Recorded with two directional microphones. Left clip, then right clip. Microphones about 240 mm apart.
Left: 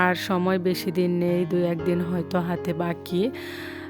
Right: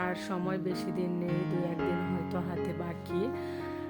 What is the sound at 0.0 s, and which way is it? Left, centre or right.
Speech, left.